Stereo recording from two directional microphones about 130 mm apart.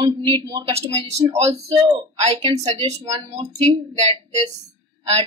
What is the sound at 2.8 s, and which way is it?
A woman's voice, 50° right (ahead or behind).